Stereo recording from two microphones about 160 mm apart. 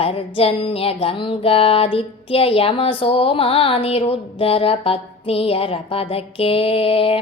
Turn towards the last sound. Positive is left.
turn(degrees=35)  # may be behind; listen again after turning